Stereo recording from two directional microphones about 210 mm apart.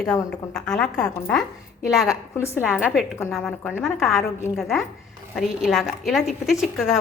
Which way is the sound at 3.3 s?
5° left (ahead or behind).